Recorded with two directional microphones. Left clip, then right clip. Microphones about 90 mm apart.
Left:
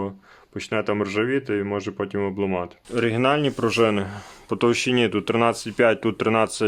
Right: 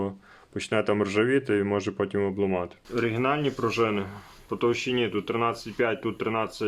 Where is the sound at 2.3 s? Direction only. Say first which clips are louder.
Left 2 dB; 25° left (ahead or behind).